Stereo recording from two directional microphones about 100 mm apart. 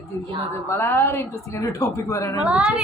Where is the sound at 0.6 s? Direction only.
25° left (ahead or behind).